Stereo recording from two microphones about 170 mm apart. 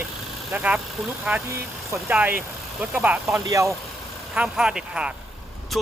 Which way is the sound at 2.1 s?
10° right (ahead or behind).